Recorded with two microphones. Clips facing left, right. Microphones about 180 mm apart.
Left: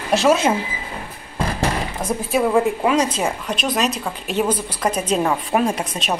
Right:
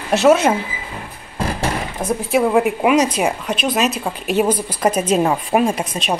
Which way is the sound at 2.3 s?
10° right (ahead or behind).